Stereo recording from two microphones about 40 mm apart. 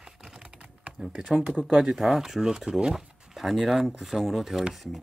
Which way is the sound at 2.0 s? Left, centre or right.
Centre.